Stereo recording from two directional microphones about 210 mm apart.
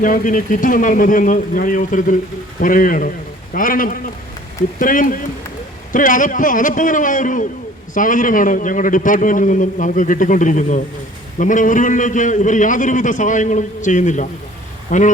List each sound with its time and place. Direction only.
0.0 s a man's voice: 40° left (ahead or behind)